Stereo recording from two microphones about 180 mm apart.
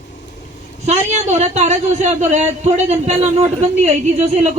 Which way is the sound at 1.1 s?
40° right (ahead or behind).